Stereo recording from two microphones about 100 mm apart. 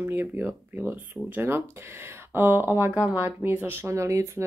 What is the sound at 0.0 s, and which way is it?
Speech, 20° right (ahead or behind).